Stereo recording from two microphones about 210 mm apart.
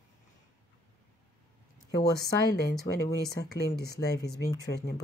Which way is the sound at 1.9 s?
50° left (ahead or behind).